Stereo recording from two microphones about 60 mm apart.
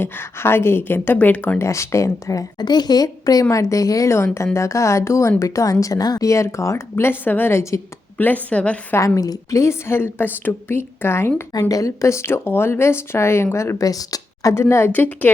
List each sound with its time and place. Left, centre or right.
0.0 s speech: left
1.5 s speech: left
2.9 s a woman's voice: left
3.5 s speech: left
4.1 s a woman's voice: left
5.8 s speech: left
6.9 s speech: left
7.5 s speech: left
8.4 s a woman's voice: left
9.0 s a woman's voice: left
11.7 s a woman's voice: left
13.7 s speech: left
14.5 s a woman's voice: left
14.9 s a woman's voice: left